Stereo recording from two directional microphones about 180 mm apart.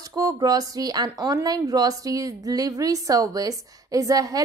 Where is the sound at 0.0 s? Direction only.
20° right (ahead or behind).